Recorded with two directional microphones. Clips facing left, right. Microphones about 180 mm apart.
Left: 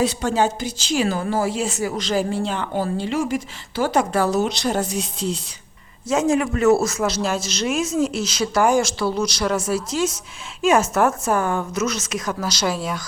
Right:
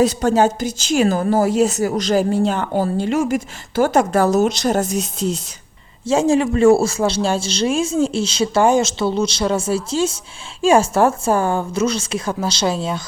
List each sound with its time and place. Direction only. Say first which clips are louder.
0.0 s a woman's voice: right 5 dB; 40° right (ahead or behind)
6.1 s a man's voice: right 4 dB; 30° right (ahead or behind)